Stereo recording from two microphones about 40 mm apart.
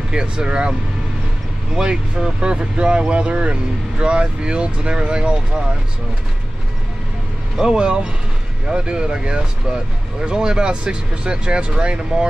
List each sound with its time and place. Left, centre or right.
0.1 s speech: right
1.8 s speech: centre
7.5 s speech: right